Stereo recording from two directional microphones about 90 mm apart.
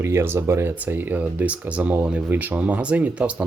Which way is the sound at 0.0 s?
30° right (ahead or behind).